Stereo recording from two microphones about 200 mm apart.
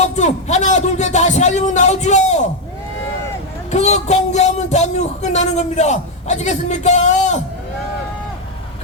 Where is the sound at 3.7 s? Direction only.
35° left (ahead or behind).